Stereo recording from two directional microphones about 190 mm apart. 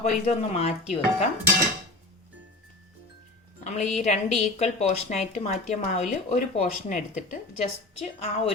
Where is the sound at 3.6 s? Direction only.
35° left (ahead or behind).